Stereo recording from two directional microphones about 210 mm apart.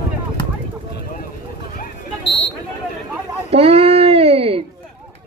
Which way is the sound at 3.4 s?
30° right (ahead or behind).